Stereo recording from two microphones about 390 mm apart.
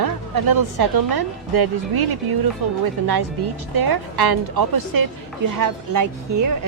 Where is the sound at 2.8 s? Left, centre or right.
Right.